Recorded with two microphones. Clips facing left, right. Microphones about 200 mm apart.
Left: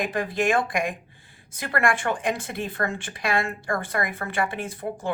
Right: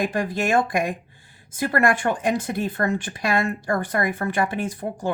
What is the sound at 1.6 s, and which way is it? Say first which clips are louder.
Speech: right 3 dB; 40° right (ahead or behind).